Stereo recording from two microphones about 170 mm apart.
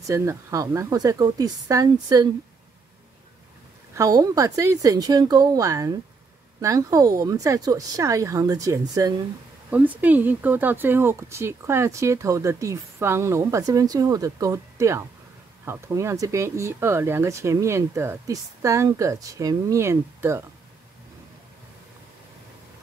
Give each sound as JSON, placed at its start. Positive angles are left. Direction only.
{"t": 0.0, "sound": "speech", "side_deg": -15}
{"t": 3.9, "sound": "speech", "side_deg": -20}
{"t": 9.7, "sound": "speech", "side_deg": -10}